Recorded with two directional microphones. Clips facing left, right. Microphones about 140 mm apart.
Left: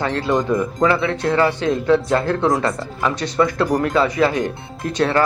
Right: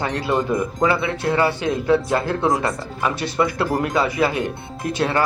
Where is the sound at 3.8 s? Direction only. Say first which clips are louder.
Left 2 dB; 20° right (ahead or behind).